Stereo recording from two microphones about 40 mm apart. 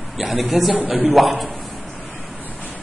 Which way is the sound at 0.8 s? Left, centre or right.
Right.